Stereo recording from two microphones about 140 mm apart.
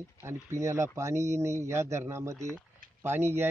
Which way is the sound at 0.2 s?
20° right (ahead or behind).